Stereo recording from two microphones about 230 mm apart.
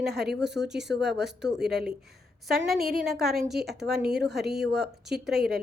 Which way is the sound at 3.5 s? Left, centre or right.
Right.